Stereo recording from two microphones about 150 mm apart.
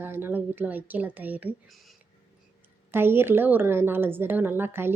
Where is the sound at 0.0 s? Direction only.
15° right (ahead or behind).